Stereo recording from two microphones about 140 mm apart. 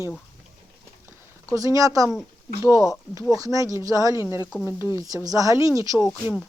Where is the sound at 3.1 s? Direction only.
25° right (ahead or behind).